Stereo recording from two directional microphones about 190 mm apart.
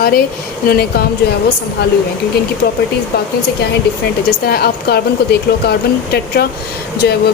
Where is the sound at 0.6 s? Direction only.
55° left (ahead or behind).